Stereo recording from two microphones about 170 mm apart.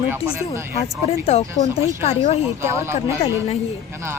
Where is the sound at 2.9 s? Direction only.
35° left (ahead or behind).